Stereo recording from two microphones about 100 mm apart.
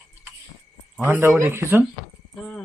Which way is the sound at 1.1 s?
25° right (ahead or behind).